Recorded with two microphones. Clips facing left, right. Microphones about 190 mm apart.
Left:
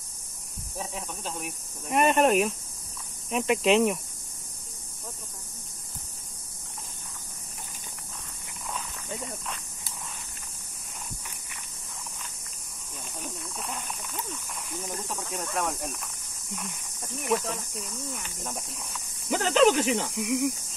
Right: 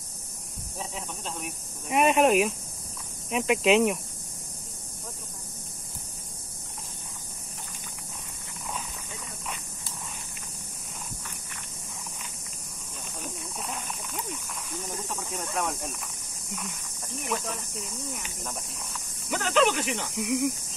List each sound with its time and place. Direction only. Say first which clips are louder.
0.7 s speech: left 1 dB; centre (ahead or behind)
13.2 s a sound: even; centre (ahead or behind)
15.1 s snake: even; 5° right (ahead or behind)
16.4 s speech: even; centre (ahead or behind)
19.3 s speech: left 3 dB; 35° left (ahead or behind)
20.1 s speech: even; centre (ahead or behind)